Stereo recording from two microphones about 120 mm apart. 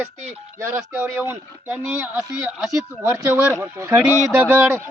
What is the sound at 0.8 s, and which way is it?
Speech, 15° right (ahead or behind).